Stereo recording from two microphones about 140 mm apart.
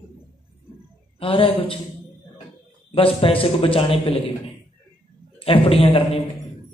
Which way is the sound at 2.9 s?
40° left (ahead or behind).